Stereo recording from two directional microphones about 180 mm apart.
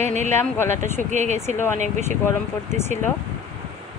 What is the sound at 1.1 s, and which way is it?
Speech, 40° right (ahead or behind).